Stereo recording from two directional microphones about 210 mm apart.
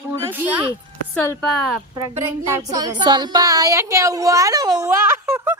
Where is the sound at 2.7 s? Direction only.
20° right (ahead or behind).